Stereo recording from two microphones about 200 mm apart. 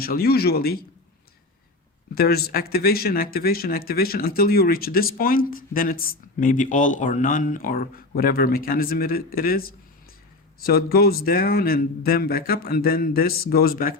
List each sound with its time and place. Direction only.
0.0 s speech: 50° left (ahead or behind)
2.1 s speech: 50° left (ahead or behind)